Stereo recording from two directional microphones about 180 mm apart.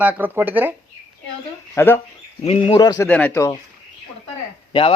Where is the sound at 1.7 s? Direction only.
10° left (ahead or behind).